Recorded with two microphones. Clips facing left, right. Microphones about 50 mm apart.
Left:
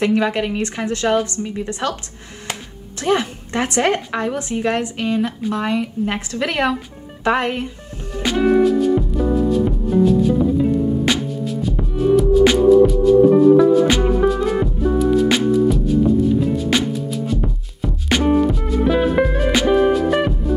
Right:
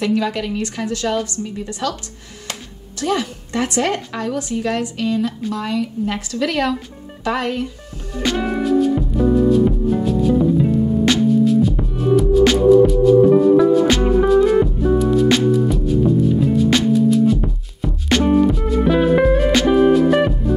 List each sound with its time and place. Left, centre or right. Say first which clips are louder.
0.0 s a woman's voice: left 2 dB; left
3.0 s a woman's voice: left 2 dB; left
8.2 s music: left 5 dB; centre